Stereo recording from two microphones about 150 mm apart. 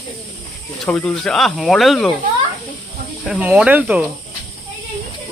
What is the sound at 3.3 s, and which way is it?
Speech, 10° right (ahead or behind).